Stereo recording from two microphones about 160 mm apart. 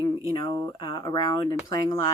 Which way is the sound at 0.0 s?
30° left (ahead or behind).